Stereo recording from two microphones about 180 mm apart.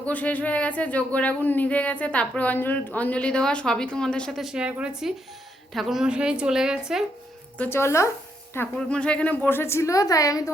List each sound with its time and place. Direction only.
0.0 s a woman's voice: 10° left (ahead or behind)
7.6 s speech: 15° left (ahead or behind)